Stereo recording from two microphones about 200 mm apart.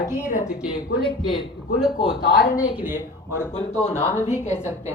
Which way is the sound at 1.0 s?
25° left (ahead or behind).